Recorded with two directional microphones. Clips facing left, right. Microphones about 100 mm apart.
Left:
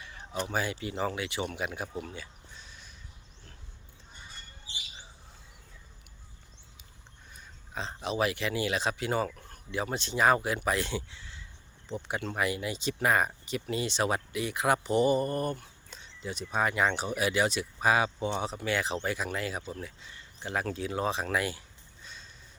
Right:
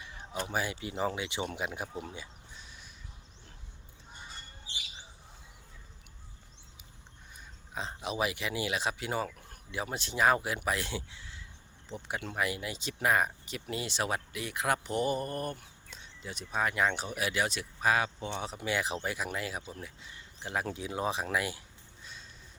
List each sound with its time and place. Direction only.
0.2 s speech: 10° right (ahead or behind)
2.0 s a sound: 20° right (ahead or behind)
7.7 s speech: 10° right (ahead or behind)
18.5 s speech: 10° right (ahead or behind)
22.0 s horse: 5° right (ahead or behind)